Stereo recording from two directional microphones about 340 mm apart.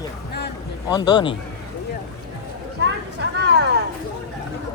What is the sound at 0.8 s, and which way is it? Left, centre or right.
Speech, centre.